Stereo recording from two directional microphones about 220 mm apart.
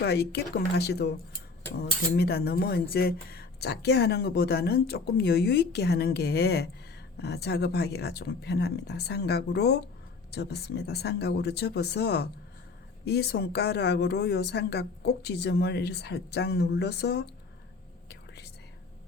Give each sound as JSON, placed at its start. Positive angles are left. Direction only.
{"t": 0.0, "sound": "cutlery", "side_deg": 45}
{"t": 18.1, "sound": "whispering", "side_deg": 50}